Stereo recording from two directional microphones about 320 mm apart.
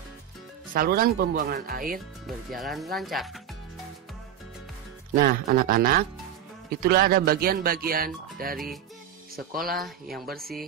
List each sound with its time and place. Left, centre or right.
0.7 s speech: right
2.2 s speech: centre
5.1 s speech: right
9.8 s speech: centre
10.2 s speech: right